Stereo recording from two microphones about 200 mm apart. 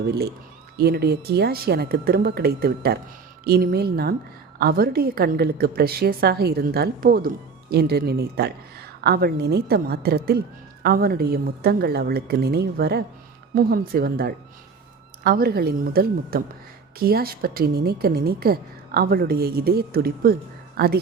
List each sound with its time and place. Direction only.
0.1 s a woman's voice: 50° right (ahead or behind)